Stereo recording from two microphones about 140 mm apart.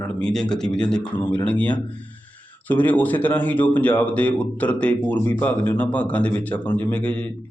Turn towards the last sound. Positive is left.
turn(degrees=10)  # may be behind; listen again after turning